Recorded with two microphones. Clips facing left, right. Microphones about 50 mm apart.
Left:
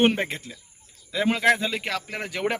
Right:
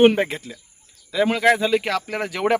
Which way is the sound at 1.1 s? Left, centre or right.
Centre.